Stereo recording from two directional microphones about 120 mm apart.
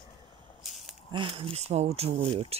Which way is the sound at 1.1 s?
45° right (ahead or behind).